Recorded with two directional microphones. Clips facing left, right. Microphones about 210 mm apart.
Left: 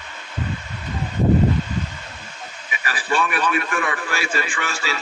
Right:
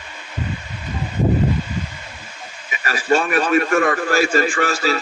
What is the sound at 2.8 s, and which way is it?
A man's voice, 40° right (ahead or behind).